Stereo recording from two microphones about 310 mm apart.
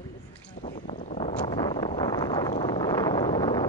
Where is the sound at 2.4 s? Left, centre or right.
Centre.